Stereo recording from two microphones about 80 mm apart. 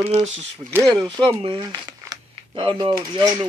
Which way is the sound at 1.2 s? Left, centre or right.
Right.